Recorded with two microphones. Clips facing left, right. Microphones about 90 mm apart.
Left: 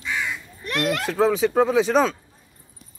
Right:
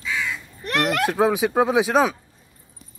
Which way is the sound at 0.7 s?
60° right (ahead or behind).